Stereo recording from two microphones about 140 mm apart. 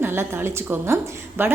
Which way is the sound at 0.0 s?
15° right (ahead or behind).